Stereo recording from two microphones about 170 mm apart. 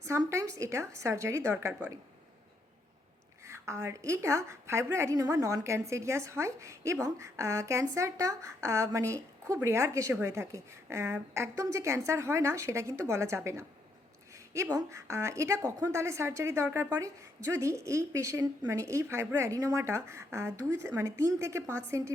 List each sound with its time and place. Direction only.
0.0 s a woman's voice: 15° right (ahead or behind)
3.4 s a woman's voice: 15° right (ahead or behind)